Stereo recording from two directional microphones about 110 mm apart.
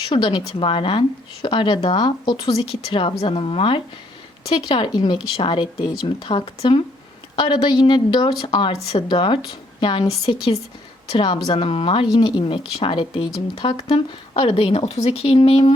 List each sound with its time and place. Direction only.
0.1 s a woman's voice: 50° left (ahead or behind)
10.2 s speech: 35° left (ahead or behind)
11.4 s a woman's voice: 55° left (ahead or behind)